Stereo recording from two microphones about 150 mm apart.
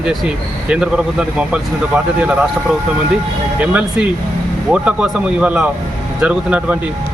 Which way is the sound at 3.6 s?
10° right (ahead or behind).